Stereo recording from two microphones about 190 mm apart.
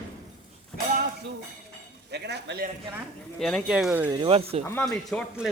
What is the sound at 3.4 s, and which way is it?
Speech, centre (ahead or behind).